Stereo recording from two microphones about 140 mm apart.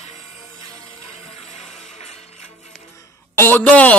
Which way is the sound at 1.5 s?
55° left (ahead or behind).